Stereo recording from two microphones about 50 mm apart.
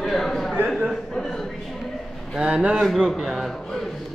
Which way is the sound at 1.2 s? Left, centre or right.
Centre.